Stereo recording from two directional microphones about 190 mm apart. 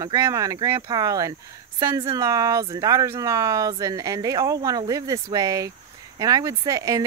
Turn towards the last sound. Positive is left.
turn(degrees=-15)  # may be behind; listen again after turning